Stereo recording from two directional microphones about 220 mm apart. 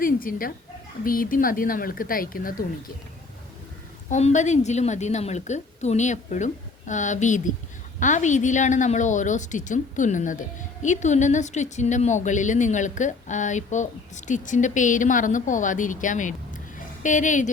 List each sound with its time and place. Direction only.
0.0 s a woman's voice: 40° left (ahead or behind)
4.1 s a woman's voice: 35° left (ahead or behind)
16.7 s a sound: 35° left (ahead or behind)